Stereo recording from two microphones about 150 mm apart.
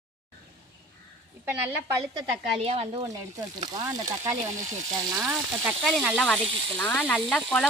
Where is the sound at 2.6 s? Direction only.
40° right (ahead or behind).